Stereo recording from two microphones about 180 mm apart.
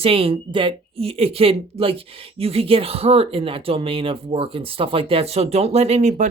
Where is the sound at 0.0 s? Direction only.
30° right (ahead or behind).